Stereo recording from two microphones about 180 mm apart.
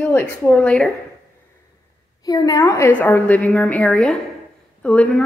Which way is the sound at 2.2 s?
20° left (ahead or behind).